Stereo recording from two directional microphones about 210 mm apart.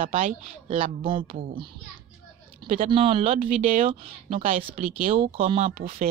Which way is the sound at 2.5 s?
25° right (ahead or behind).